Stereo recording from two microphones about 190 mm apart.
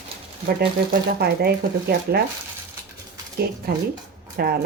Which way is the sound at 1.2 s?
55° right (ahead or behind).